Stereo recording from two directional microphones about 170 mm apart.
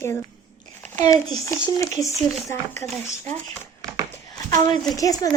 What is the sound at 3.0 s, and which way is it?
Speech, 10° left (ahead or behind).